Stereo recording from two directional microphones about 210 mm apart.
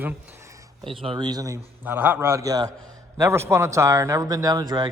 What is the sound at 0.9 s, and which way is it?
Speech, 25° right (ahead or behind).